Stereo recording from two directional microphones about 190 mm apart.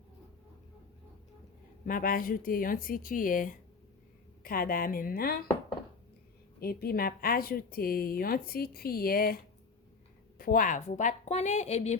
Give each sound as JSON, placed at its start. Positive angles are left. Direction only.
{"t": 1.8, "sound": "speech", "side_deg": 45}
{"t": 6.6, "sound": "a woman's voice", "side_deg": 55}